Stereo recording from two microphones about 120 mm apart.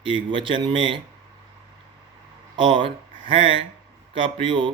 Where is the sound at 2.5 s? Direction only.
45° right (ahead or behind).